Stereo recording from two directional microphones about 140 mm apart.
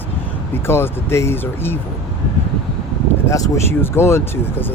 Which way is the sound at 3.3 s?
25° left (ahead or behind).